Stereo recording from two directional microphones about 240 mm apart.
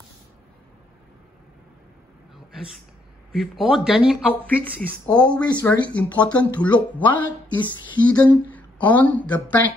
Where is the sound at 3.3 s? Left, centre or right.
Centre.